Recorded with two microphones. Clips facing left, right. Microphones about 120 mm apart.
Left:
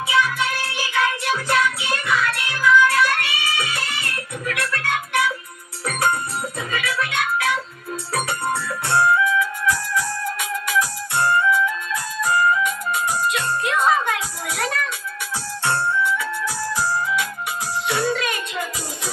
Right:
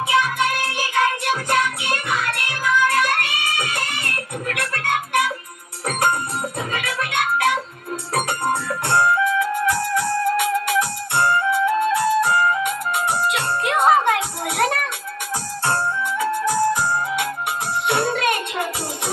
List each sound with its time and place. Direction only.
0.1 s music: 55° right (ahead or behind)
15.6 s music: 45° right (ahead or behind); by 18.7 s 60° right (ahead or behind)